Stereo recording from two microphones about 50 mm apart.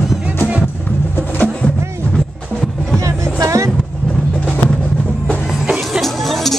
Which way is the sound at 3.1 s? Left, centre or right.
Right.